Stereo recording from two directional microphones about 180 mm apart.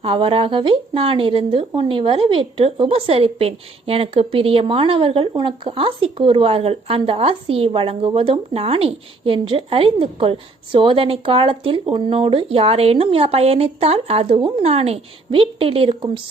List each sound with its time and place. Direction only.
0.0 s speech: 30° right (ahead or behind)